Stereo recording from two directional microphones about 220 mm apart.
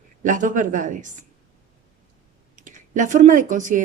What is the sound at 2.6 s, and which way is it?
Speech, 35° right (ahead or behind).